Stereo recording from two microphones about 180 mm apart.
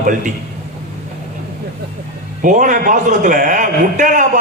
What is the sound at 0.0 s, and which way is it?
Speech, 45° right (ahead or behind).